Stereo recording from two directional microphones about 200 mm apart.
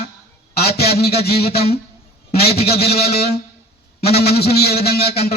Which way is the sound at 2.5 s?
30° left (ahead or behind).